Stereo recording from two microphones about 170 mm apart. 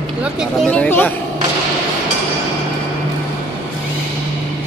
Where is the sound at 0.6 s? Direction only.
5° left (ahead or behind).